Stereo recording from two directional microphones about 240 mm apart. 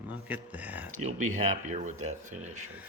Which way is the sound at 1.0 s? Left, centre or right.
Right.